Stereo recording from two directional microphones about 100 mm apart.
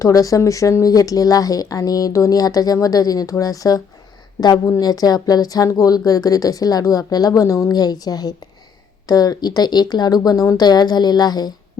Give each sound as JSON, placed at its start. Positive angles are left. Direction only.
{"t": 0.0, "sound": "speech", "side_deg": 35}